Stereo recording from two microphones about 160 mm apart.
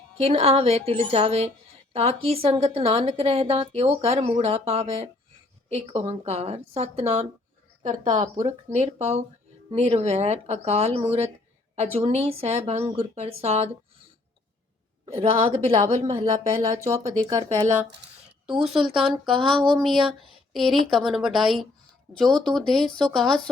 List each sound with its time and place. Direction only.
0.2 s a woman's voice: 40° right (ahead or behind)
15.0 s a woman's voice: 40° right (ahead or behind)
16.9 s speech: 20° right (ahead or behind)
18.8 s a woman's voice: 35° right (ahead or behind)
19.4 s a woman's voice: centre (ahead or behind)